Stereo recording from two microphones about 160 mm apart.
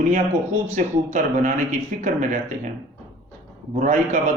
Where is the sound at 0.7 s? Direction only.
50° right (ahead or behind).